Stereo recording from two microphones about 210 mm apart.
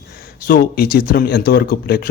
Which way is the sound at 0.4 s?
45° left (ahead or behind).